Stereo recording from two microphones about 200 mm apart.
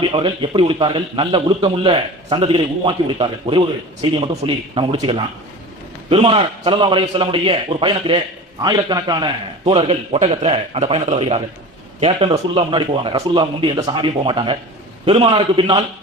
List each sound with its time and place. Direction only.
0.0 s a man's voice: 25° right (ahead or behind)